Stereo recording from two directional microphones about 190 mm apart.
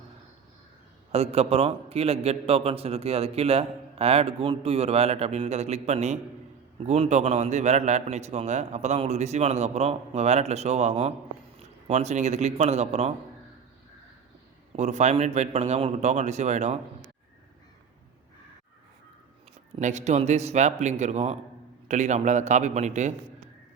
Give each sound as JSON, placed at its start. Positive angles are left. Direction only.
{"t": 1.1, "sound": "a man's voice", "side_deg": -35}
{"t": 14.8, "sound": "a man's voice", "side_deg": -35}
{"t": 19.8, "sound": "a man's voice", "side_deg": -40}